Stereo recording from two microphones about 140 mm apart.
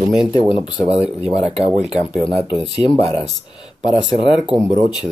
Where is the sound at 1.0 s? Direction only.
5° right (ahead or behind).